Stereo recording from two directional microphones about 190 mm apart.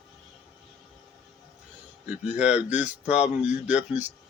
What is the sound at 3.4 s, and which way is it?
Speech, 5° right (ahead or behind).